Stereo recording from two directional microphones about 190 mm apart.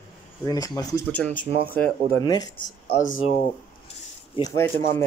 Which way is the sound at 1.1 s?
5° left (ahead or behind).